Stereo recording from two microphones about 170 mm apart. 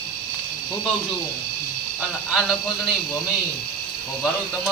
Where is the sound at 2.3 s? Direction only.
Centre (ahead or behind).